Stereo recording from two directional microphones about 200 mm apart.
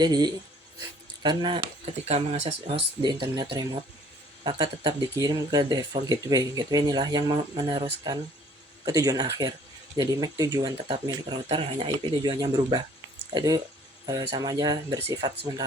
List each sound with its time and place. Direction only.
0.0 s speech: 20° right (ahead or behind)